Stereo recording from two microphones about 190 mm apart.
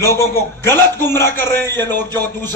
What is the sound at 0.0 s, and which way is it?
A man's voice, 15° left (ahead or behind).